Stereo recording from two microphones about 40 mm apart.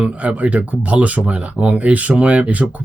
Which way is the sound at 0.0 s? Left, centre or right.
Right.